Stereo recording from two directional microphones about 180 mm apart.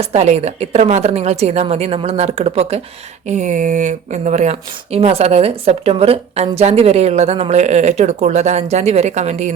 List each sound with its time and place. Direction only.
0.0 s speech: 35° right (ahead or behind)